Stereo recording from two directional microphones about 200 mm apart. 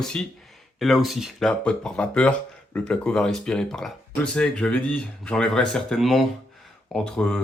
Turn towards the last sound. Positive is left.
turn(degrees=5)  # may be behind; listen again after turning